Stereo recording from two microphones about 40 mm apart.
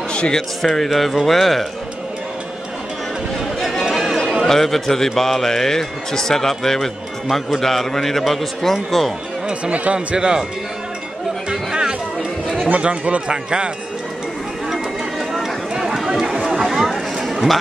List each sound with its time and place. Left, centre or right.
0.1 s a sound: left
0.6 s speech: centre
3.9 s a sound: centre
4.5 s a man's voice: centre
9.5 s speech: right
9.9 s speech: centre
11.7 s music: centre
12.8 s speech: right
13.3 s speech: right
14.7 s a sound: centre